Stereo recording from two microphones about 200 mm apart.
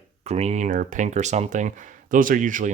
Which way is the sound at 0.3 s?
30° right (ahead or behind).